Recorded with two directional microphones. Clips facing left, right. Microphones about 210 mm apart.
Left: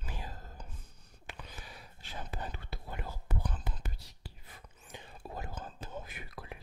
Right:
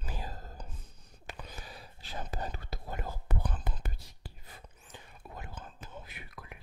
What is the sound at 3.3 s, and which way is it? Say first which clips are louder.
Whispering: even; 60° right (ahead or behind).